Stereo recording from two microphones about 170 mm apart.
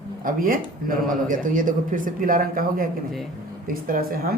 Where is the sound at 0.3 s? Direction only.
55° right (ahead or behind).